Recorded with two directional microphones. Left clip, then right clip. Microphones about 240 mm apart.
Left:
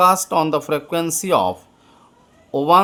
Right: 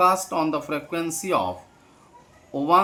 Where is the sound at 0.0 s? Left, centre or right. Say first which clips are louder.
Left 5 dB; left.